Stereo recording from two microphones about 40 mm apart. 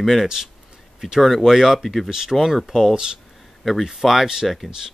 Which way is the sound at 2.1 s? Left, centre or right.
Centre.